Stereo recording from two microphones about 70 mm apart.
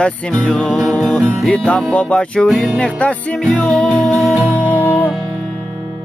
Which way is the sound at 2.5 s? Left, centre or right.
Centre.